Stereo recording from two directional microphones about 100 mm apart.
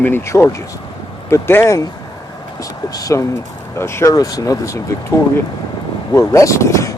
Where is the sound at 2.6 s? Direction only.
35° left (ahead or behind).